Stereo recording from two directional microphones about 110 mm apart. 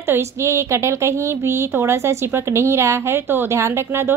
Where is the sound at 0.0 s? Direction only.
25° right (ahead or behind).